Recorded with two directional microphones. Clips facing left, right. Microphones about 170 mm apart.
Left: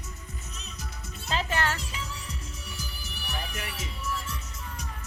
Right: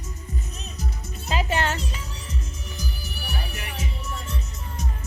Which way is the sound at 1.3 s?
15° right (ahead or behind).